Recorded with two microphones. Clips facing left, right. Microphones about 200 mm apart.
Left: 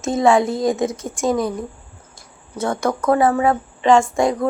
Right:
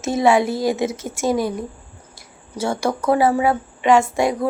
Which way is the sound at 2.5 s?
30° right (ahead or behind).